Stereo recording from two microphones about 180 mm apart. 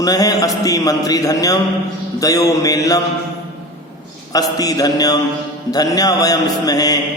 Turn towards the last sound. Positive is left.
turn(degrees=20)  # may be behind; listen again after turning